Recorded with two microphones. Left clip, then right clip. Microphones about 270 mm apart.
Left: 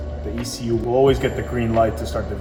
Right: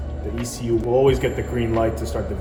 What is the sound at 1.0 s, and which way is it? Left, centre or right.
Speech, centre.